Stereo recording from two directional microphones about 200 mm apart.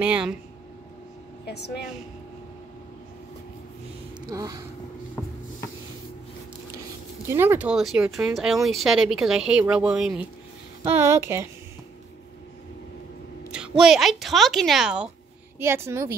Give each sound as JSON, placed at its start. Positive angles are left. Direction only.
{"t": 0.0, "sound": "a woman's voice", "side_deg": -5}
{"t": 1.4, "sound": "speech", "side_deg": 55}
{"t": 4.3, "sound": "speech", "side_deg": -20}
{"t": 7.2, "sound": "a woman's voice", "side_deg": -10}
{"t": 13.5, "sound": "a woman's voice", "side_deg": -5}